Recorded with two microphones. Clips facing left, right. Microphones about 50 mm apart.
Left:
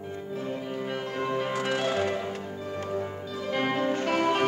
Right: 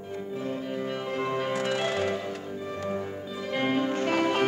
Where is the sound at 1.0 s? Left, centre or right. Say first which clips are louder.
Even; centre.